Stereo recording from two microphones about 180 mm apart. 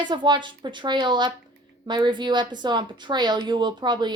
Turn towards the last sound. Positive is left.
turn(degrees=-25)  # may be behind; listen again after turning